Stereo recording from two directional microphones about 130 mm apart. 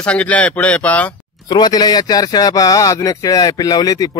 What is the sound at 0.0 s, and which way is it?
A man's voice, 10° left (ahead or behind).